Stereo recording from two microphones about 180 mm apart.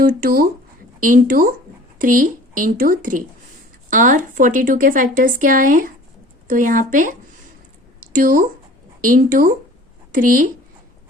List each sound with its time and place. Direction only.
0.0 s a woman's voice: 50° right (ahead or behind)